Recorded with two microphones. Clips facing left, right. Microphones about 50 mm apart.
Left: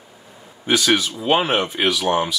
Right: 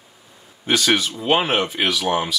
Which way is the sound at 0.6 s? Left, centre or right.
Centre.